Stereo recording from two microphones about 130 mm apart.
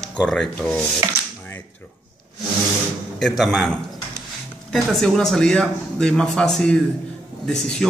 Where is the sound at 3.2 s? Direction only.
Centre (ahead or behind).